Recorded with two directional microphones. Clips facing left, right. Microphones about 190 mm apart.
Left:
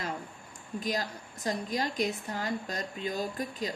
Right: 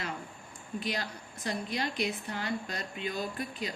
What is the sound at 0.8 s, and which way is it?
A woman's voice, 40° left (ahead or behind).